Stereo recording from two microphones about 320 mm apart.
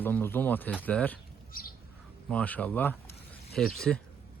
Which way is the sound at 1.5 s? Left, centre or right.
Left.